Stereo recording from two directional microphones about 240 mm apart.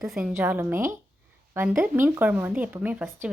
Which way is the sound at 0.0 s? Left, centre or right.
Centre.